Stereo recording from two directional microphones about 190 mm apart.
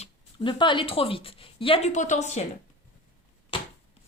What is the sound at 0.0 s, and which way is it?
Speech, 25° left (ahead or behind).